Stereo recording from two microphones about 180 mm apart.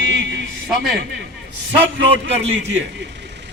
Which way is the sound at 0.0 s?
90° right.